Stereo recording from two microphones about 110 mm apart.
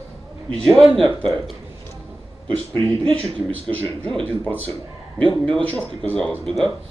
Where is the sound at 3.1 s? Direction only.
15° left (ahead or behind).